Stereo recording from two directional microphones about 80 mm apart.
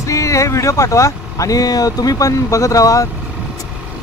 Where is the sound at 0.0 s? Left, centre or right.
Left.